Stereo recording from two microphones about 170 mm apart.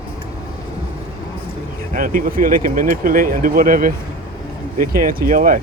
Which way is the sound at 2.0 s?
55° right (ahead or behind).